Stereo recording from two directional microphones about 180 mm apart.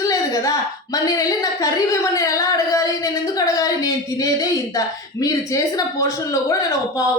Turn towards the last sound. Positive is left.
turn(degrees=20)  # may be behind; listen again after turning